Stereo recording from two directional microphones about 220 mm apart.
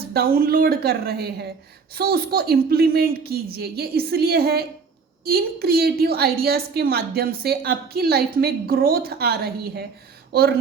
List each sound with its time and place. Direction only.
0.1 s a woman's voice: 45° right (ahead or behind)